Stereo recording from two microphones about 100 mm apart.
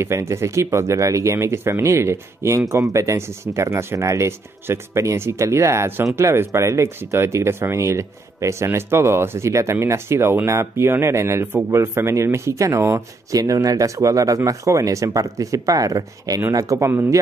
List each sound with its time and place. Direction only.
0.0 s speech: 30° right (ahead or behind)